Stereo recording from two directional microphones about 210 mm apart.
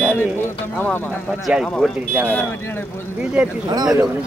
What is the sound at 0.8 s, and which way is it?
Speech, 10° left (ahead or behind).